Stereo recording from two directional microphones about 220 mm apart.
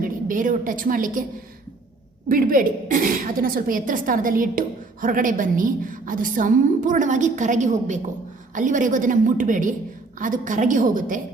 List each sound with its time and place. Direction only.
0.0 s a woman's voice: 40° right (ahead or behind)
2.3 s a woman's voice: 40° right (ahead or behind)